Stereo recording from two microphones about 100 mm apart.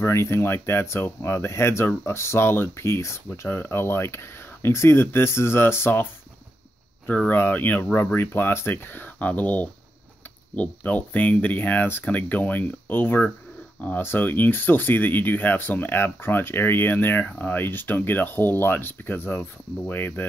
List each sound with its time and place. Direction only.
0.0 s speech: 25° left (ahead or behind)
7.1 s speech: 20° left (ahead or behind)